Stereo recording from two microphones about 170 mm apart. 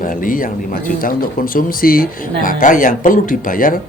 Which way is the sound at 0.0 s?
55° left (ahead or behind).